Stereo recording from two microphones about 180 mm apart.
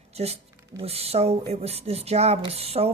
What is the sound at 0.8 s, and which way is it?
Mechanisms, 35° right (ahead or behind).